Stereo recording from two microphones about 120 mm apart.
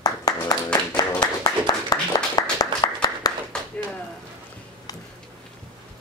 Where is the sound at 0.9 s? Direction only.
35° left (ahead or behind).